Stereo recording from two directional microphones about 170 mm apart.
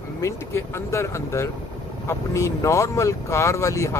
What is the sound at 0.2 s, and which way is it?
Speech, 15° left (ahead or behind).